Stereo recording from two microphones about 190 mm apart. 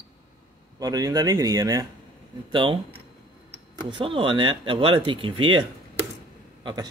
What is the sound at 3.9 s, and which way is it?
Speech, 25° right (ahead or behind).